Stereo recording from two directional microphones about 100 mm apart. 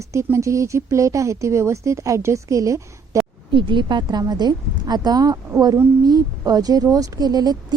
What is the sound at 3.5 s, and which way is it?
A woman's voice, 55° right (ahead or behind).